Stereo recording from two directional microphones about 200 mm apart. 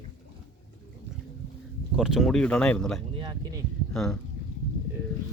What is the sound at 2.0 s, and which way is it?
Speech, centre (ahead or behind).